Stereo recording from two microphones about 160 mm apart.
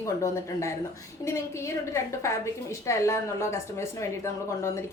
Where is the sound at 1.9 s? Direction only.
20° left (ahead or behind).